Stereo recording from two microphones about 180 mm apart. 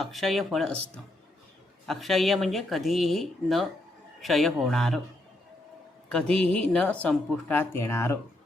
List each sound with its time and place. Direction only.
0.0 s speech: centre (ahead or behind)
1.9 s speech: centre (ahead or behind)
6.4 s speech: 5° left (ahead or behind)